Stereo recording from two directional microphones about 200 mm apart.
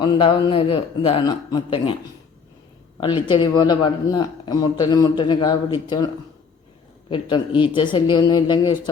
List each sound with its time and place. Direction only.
0.0 s speech: 25° left (ahead or behind)
3.0 s speech: 25° left (ahead or behind)
7.1 s speech: 25° left (ahead or behind)